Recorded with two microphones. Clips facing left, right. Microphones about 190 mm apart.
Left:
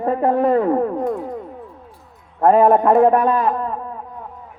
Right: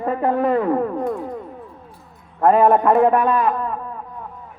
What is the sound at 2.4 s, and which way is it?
A man's voice, 35° left (ahead or behind).